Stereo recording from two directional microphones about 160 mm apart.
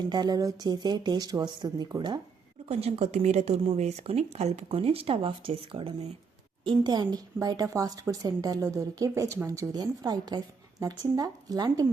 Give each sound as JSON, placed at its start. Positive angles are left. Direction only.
{"t": 0.1, "sound": "a woman's voice", "side_deg": -25}
{"t": 2.6, "sound": "a woman's voice", "side_deg": -40}